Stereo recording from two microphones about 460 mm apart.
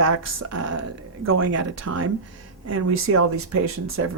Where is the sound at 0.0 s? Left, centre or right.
Right.